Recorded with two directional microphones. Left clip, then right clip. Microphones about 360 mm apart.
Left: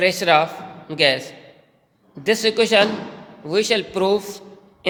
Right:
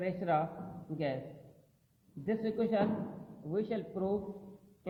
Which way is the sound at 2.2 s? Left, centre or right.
Left.